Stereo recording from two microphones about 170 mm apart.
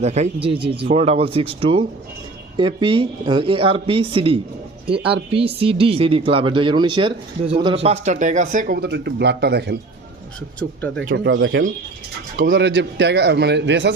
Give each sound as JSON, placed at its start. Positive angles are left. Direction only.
{"t": 0.0, "sound": "speech", "side_deg": -40}
{"t": 10.6, "sound": "speech", "side_deg": 10}
{"t": 11.1, "sound": "a man's voice", "side_deg": -75}
{"t": 12.5, "sound": "a man's voice", "side_deg": -90}